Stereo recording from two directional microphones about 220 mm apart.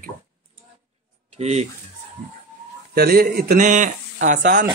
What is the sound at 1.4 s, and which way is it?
Speech, 30° right (ahead or behind).